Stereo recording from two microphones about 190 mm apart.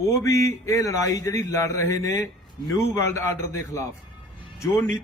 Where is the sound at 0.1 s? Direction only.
15° left (ahead or behind).